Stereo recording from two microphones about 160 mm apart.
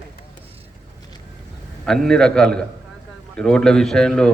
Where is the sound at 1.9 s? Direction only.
5° left (ahead or behind).